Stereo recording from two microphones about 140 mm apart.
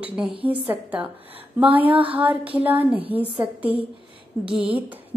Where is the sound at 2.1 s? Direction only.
10° right (ahead or behind).